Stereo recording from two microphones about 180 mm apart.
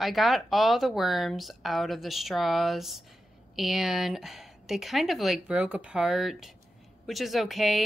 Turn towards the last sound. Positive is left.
turn(degrees=0)  # may be behind; listen again after turning